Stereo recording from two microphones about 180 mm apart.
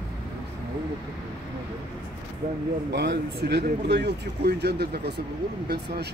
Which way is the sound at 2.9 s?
70° right (ahead or behind).